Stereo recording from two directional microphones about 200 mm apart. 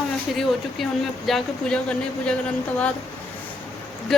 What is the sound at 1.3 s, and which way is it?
Speech, 5° left (ahead or behind).